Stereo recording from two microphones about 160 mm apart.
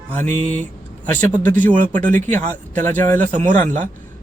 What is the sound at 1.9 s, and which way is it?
A man's voice, 55° right (ahead or behind).